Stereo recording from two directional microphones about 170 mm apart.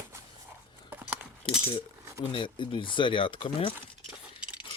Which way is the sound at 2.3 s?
30° left (ahead or behind).